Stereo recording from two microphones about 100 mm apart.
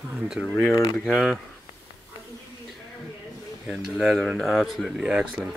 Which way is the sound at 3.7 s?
Centre (ahead or behind).